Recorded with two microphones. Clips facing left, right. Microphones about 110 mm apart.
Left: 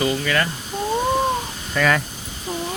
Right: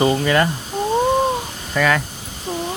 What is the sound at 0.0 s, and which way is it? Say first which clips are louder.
Speech: right 5 dB; 30° right (ahead or behind).